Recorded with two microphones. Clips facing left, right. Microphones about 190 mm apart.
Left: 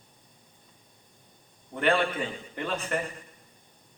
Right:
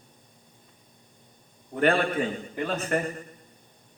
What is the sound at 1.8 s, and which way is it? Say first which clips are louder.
A man's voice: right 3 dB; 45° right (ahead or behind).